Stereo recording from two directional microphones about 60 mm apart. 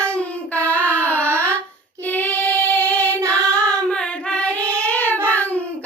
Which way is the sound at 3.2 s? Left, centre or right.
Right.